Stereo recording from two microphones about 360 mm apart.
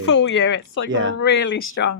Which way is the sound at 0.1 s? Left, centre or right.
Left.